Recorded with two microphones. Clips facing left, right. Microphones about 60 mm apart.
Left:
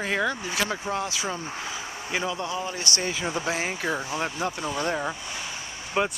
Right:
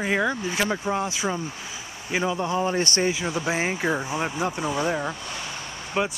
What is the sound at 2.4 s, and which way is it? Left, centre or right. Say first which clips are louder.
Speech: right 6 dB; right.